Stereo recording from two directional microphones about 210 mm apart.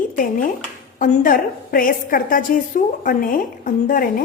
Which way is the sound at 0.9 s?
40° left (ahead or behind).